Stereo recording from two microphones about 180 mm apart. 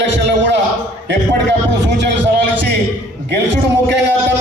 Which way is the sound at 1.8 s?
75° right (ahead or behind).